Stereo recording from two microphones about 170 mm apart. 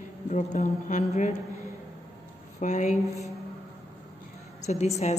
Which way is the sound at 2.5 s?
45° left (ahead or behind).